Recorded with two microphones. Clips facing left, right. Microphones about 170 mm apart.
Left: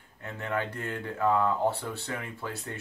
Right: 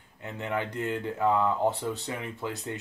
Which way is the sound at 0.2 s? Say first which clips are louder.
Even; 20° right (ahead or behind).